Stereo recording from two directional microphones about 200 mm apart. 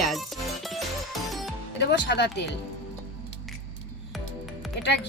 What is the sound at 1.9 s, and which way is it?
Speech, 55° left (ahead or behind).